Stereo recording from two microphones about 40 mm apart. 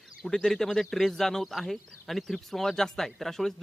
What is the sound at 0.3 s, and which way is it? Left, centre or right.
Speech, centre.